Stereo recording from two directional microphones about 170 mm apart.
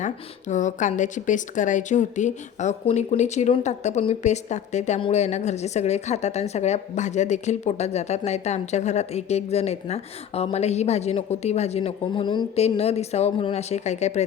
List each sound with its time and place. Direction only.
0.0 s a woman's voice: 45° left (ahead or behind)